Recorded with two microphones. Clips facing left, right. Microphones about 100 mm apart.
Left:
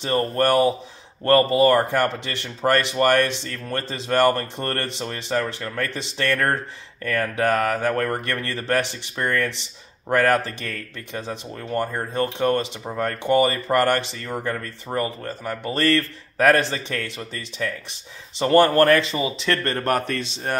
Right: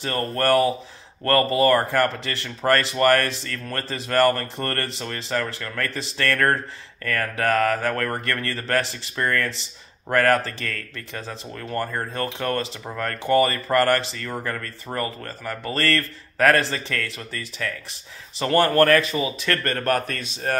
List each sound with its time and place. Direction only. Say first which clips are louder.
0.0 s speech: left 3 dB; 20° left (ahead or behind)